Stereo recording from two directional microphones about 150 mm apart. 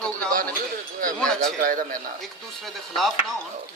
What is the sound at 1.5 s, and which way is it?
Speech, 65° right (ahead or behind).